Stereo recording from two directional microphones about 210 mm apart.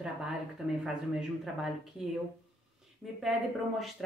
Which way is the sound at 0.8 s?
Centre (ahead or behind).